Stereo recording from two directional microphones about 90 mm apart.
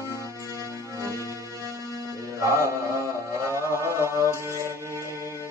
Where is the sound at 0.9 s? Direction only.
35° right (ahead or behind).